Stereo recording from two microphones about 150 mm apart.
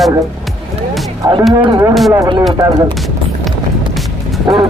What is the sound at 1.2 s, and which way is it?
Speech, 30° right (ahead or behind).